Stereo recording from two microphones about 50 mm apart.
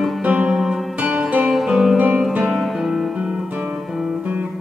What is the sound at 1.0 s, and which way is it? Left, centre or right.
Music, right.